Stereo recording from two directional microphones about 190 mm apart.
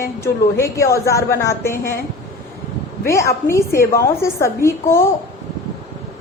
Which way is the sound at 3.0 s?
15° left (ahead or behind).